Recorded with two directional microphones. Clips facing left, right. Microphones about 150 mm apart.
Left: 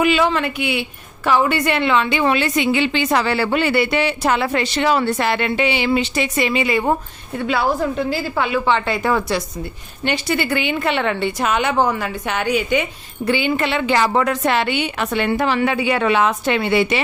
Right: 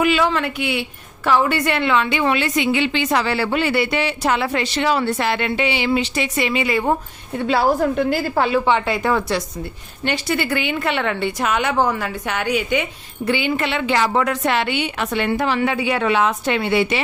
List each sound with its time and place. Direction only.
0.0 s a woman's voice: 20° left (ahead or behind); by 6.7 s 40° left (ahead or behind)
7.3 s a woman's voice: 35° right (ahead or behind); by 8.3 s 55° right (ahead or behind)
8.4 s a woman's voice: 35° right (ahead or behind)
8.9 s a woman's voice: 5° left (ahead or behind)
10.1 s a woman's voice: 20° left (ahead or behind); by 17.0 s 70° left (ahead or behind)